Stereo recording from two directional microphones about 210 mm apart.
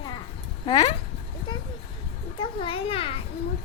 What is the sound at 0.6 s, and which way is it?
Speech, 25° left (ahead or behind).